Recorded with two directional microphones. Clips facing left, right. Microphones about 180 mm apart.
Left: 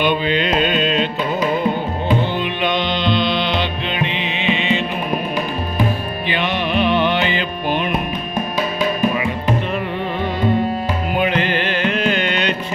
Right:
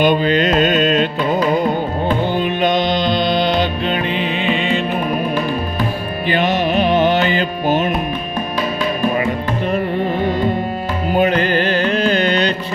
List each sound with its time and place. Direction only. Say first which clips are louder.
0.0 s music: right 4 dB; 40° right (ahead or behind)
2.3 s music: right 4 dB; 40° right (ahead or behind)
6.2 s music: right 5 dB; 45° right (ahead or behind)
11.1 s music: right 5 dB; 40° right (ahead or behind)